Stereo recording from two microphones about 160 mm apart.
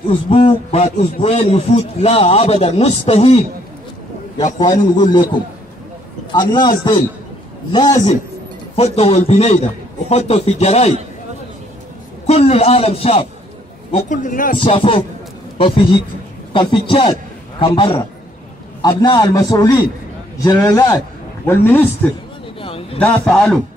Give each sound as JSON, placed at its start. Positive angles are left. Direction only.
{"t": 0.3, "sound": "a man's voice", "side_deg": 40}
{"t": 4.9, "sound": "a man's voice", "side_deg": 30}
{"t": 6.5, "sound": "a man's voice", "side_deg": 30}
{"t": 8.7, "sound": "a man's voice", "side_deg": 40}
{"t": 12.3, "sound": "a man's voice", "side_deg": 40}
{"t": 13.9, "sound": "speech", "side_deg": 50}
{"t": 14.6, "sound": "a man's voice", "side_deg": 35}
{"t": 22.6, "sound": "a sound", "side_deg": 35}
{"t": 22.9, "sound": "a man's voice", "side_deg": 5}